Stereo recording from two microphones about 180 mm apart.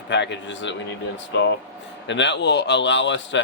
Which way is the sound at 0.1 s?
80° left.